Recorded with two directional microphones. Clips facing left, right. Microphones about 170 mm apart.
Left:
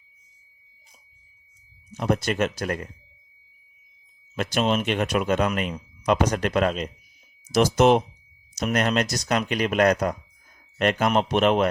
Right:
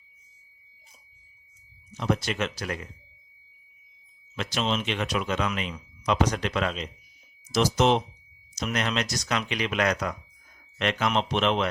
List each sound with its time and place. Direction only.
2.0 s speech: 50° left (ahead or behind)
4.4 s speech: 50° left (ahead or behind)